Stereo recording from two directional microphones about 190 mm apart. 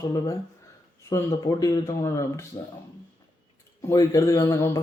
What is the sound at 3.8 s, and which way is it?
Speech, 20° left (ahead or behind).